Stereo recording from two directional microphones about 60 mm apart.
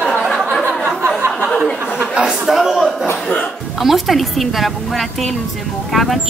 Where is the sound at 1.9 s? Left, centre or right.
Centre.